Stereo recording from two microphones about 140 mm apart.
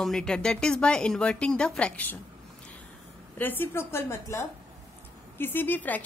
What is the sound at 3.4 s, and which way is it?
A woman's voice, 15° left (ahead or behind).